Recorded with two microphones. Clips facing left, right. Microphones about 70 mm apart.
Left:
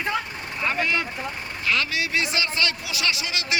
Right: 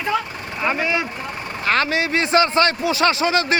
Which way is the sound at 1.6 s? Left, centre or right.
Right.